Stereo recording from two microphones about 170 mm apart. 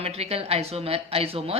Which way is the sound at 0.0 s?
35° right (ahead or behind).